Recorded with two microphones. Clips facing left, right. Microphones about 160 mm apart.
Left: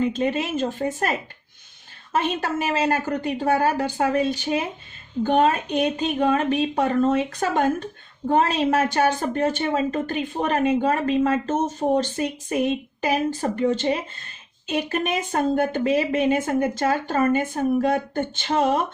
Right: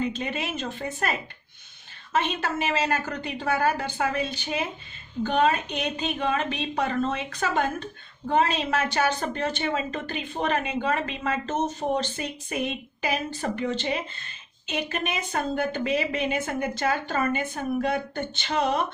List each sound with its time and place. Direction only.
0.2 s speech: 40° left (ahead or behind)
2.1 s speech: 40° left (ahead or behind)